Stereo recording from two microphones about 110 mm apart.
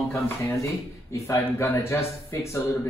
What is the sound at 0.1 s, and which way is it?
A man's voice, 25° left (ahead or behind).